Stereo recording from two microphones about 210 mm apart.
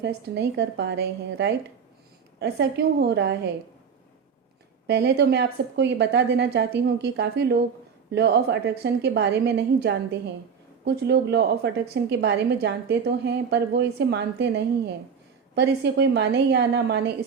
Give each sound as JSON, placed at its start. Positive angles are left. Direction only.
{"t": 0.0, "sound": "a woman's voice", "side_deg": -55}
{"t": 4.9, "sound": "a woman's voice", "side_deg": -55}